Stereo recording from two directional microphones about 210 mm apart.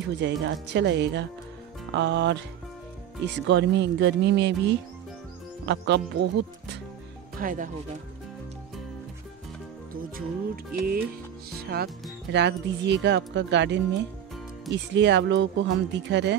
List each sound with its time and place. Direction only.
0.0 s speech: 60° right (ahead or behind)
3.3 s speech: 60° right (ahead or behind)
5.7 s music: 55° right (ahead or behind)
7.3 s speech: 40° right (ahead or behind)
10.1 s music: 45° right (ahead or behind)
11.6 s speech: 50° right (ahead or behind)